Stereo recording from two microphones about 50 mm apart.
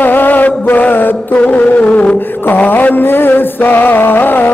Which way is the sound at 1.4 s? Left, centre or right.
Left.